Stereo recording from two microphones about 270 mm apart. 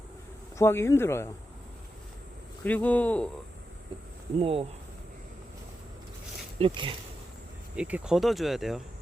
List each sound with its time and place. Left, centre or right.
0.5 s speech: centre
2.6 s speech: centre
4.4 s speech: right
6.6 s speech: centre
7.8 s speech: centre